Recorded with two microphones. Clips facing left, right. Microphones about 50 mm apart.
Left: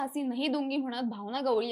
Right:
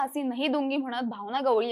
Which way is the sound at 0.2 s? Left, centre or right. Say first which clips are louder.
Even; right.